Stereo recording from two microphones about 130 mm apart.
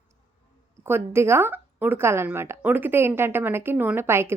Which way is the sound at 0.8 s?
20° right (ahead or behind).